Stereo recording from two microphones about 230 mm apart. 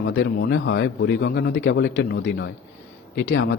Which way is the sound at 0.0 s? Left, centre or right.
Left.